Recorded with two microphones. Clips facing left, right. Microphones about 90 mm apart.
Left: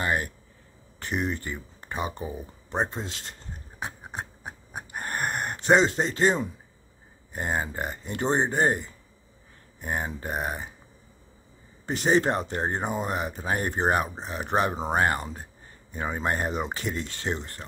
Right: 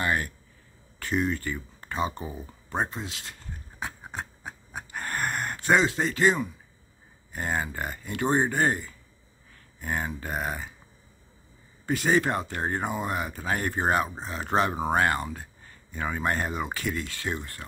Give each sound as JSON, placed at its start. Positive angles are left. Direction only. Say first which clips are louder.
{"t": 0.0, "sound": "speech", "louder": "even", "side_deg": 25}
{"t": 2.9, "sound": "a sound", "louder": "left 1 dB", "side_deg": 40}
{"t": 7.3, "sound": "speech", "louder": "left 1 dB", "side_deg": 25}
{"t": 11.8, "sound": "speech", "louder": "left 1 dB", "side_deg": 25}